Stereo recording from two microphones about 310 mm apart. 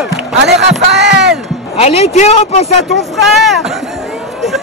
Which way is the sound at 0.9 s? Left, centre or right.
Right.